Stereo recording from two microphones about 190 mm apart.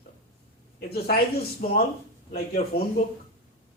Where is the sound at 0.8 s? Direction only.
55° left (ahead or behind).